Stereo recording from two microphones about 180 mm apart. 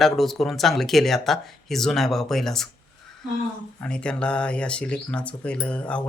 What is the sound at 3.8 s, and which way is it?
Speech, 5° left (ahead or behind).